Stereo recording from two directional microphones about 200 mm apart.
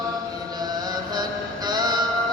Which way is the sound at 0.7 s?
20° right (ahead or behind).